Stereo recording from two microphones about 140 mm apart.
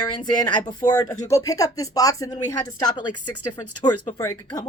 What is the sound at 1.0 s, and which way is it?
Speech, 20° left (ahead or behind).